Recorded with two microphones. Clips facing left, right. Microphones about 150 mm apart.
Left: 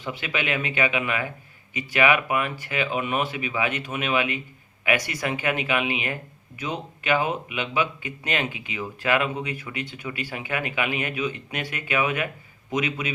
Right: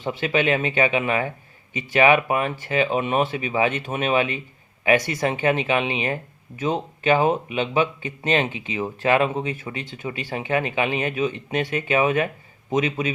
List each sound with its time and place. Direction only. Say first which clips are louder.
0.0 s speech: right 7 dB; 30° right (ahead or behind)